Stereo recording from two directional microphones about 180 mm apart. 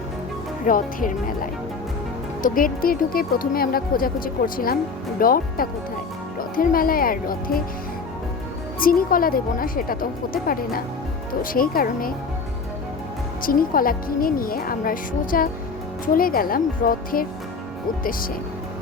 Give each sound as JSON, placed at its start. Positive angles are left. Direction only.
{"t": 0.6, "sound": "speech", "side_deg": 50}
{"t": 8.8, "sound": "speech", "side_deg": 50}
{"t": 13.4, "sound": "speech", "side_deg": 50}